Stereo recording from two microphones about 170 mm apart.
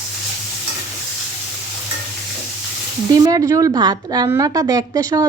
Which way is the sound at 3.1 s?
20° right (ahead or behind).